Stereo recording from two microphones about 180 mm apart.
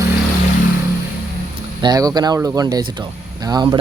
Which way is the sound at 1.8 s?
20° right (ahead or behind).